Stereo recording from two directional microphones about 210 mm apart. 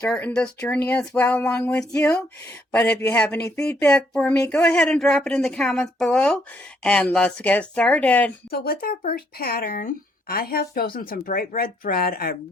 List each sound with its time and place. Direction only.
0.0 s speech: 5° left (ahead or behind)
8.4 s speech: 45° left (ahead or behind)